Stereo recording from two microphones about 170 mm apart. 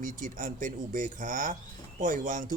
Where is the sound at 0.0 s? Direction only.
50° right (ahead or behind).